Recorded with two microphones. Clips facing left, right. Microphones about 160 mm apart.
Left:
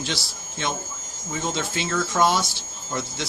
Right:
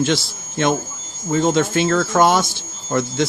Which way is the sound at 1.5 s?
55° right (ahead or behind).